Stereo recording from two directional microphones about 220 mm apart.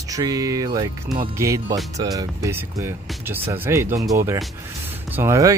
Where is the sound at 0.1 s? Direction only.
15° right (ahead or behind).